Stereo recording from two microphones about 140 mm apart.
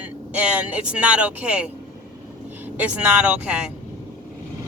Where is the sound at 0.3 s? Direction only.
10° right (ahead or behind).